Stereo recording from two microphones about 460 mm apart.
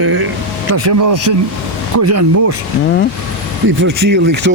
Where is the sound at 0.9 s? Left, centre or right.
Right.